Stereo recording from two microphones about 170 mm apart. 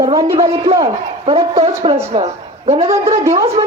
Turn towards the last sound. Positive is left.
turn(degrees=-40)  # may be behind; listen again after turning